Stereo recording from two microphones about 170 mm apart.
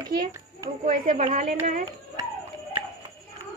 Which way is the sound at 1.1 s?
55° right (ahead or behind).